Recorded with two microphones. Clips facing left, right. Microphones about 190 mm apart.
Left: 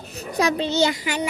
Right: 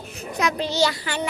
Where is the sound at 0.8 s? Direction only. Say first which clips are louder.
Left 1 dB; 15° left (ahead or behind).